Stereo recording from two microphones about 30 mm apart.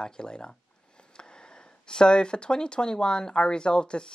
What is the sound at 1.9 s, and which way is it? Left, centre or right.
Speech, left.